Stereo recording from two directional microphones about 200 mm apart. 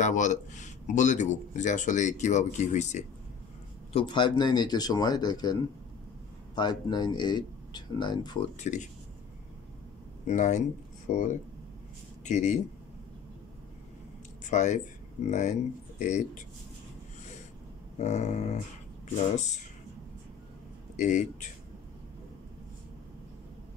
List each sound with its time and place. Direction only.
0.0 s speech: 35° left (ahead or behind)
3.9 s speech: 25° left (ahead or behind)
8.5 s speech: 35° left (ahead or behind)
10.2 s speech: 35° left (ahead or behind)
12.3 s speech: 35° left (ahead or behind)
14.4 s speech: 35° left (ahead or behind)
17.9 s speech: 35° left (ahead or behind)
20.9 s speech: 35° left (ahead or behind)